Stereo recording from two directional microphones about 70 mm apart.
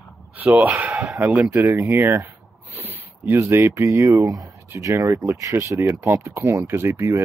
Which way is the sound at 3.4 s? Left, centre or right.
Right.